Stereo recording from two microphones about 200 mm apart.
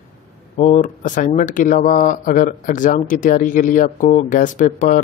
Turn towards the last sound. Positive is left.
turn(degrees=40)  # may be behind; listen again after turning